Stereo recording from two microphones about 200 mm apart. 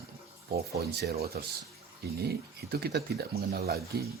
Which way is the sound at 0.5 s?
55° right (ahead or behind).